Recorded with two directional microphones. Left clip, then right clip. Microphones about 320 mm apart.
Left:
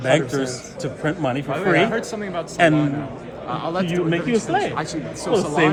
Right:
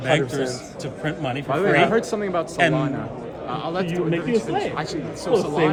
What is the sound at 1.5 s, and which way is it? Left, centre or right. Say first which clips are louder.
Speech: right 2 dB; right.